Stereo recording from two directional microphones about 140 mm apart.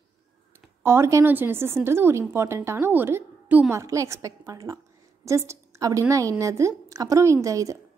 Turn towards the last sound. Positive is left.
turn(degrees=-25)  # may be behind; listen again after turning